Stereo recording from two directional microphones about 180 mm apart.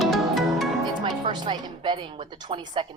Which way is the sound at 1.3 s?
25° right (ahead or behind).